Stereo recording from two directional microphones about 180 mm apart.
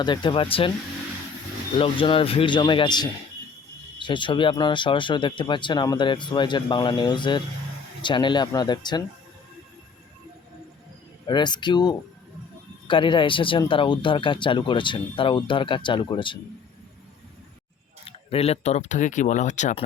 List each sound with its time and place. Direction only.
0.0 s speech: 25° left (ahead or behind)
1.8 s speech: 30° left (ahead or behind)
11.3 s speech: 25° left (ahead or behind)
18.0 s speech: 35° left (ahead or behind)